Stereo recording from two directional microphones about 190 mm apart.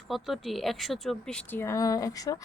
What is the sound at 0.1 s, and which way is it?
Speech, centre (ahead or behind).